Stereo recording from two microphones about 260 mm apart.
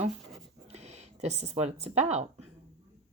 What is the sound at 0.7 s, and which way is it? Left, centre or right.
Speech, right.